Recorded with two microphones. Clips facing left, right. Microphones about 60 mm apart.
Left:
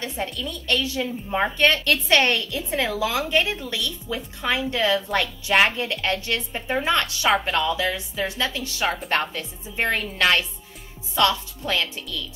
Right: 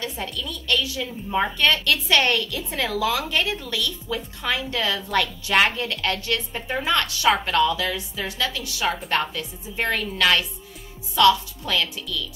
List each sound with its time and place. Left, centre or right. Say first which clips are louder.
0.5 s a woman's voice: right 1 dB; left